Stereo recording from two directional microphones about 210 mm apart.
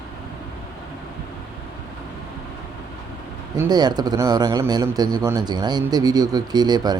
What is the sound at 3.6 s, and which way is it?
A man's voice, 20° right (ahead or behind).